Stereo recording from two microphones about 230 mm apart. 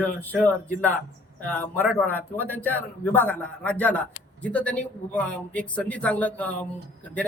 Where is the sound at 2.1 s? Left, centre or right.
Centre.